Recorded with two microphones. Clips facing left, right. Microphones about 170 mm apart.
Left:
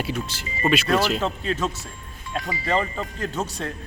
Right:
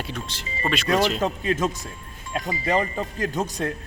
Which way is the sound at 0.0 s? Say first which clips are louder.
Left 4 dB; 5° left (ahead or behind).